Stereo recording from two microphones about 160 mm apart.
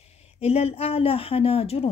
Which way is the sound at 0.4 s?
40° left (ahead or behind).